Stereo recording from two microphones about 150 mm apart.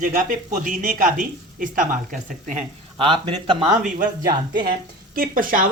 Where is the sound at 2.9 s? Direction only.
35° right (ahead or behind).